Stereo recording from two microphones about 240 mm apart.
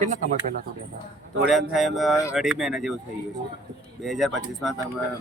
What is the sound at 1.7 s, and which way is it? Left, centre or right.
Speech, centre.